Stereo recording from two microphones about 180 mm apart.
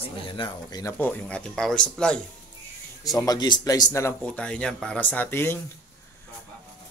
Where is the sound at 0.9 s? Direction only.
10° left (ahead or behind).